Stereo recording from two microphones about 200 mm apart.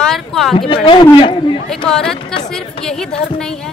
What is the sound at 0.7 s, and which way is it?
Speech, 25° left (ahead or behind).